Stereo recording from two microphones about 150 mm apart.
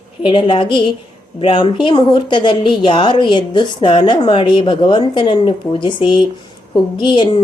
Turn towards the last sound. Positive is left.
turn(degrees=30)  # may be behind; listen again after turning